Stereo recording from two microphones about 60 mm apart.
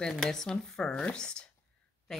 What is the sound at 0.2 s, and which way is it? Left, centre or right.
Speech, centre.